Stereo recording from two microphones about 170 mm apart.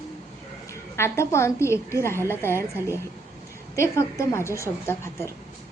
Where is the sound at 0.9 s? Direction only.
15° left (ahead or behind).